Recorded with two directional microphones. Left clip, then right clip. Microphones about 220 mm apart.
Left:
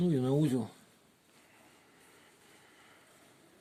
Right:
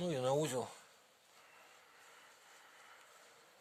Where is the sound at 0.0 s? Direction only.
40° right (ahead or behind).